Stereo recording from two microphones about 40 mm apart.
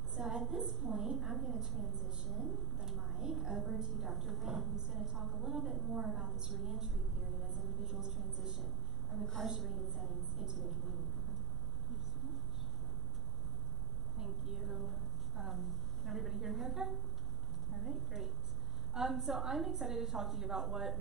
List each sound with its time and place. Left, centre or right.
0.1 s a woman's voice: centre
4.7 s a woman's voice: centre
5.5 s speech: right
6.0 s a woman's voice: centre
7.8 s a woman's voice: centre
9.1 s a woman's voice: centre
9.9 s a woman's voice: centre
14.1 s a woman's voice: centre
18.9 s a woman's voice: centre